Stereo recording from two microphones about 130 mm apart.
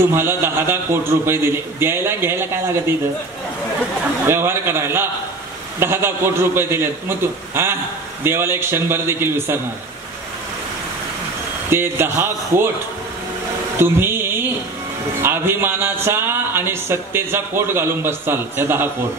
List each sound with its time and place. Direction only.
0.0 s a man's voice: 15° right (ahead or behind)
4.3 s speech: 20° right (ahead or behind)
11.7 s speech: 20° right (ahead or behind)
13.7 s a sound: 15° right (ahead or behind)
15.2 s speech: 15° right (ahead or behind)